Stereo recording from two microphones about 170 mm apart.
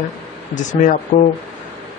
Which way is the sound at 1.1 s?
45° left (ahead or behind).